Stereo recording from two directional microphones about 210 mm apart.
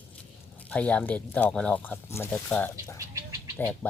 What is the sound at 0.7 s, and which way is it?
Speech, 5° left (ahead or behind).